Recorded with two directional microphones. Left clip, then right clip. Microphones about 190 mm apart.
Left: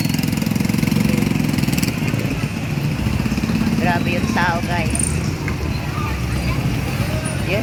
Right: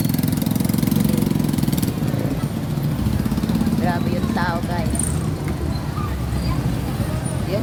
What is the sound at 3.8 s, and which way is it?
Speech, 10° left (ahead or behind).